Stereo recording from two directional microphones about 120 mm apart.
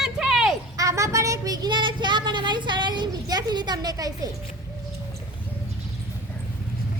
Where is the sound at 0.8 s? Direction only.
25° right (ahead or behind).